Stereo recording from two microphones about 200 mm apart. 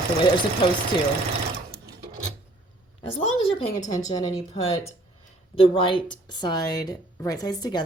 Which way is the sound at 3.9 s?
20° left (ahead or behind).